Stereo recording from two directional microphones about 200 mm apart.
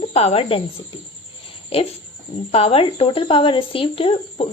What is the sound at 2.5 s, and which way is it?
Speech, 30° left (ahead or behind).